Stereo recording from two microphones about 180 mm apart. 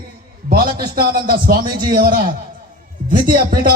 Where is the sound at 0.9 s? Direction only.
55° right (ahead or behind).